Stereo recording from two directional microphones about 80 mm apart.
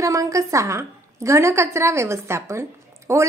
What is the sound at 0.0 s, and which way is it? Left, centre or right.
A woman's voice, right.